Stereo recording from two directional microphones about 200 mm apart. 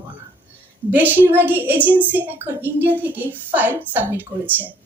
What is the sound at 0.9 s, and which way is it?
A woman's voice, 10° right (ahead or behind).